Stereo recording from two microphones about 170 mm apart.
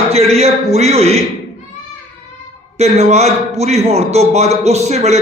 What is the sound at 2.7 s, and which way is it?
A man's voice, 40° right (ahead or behind).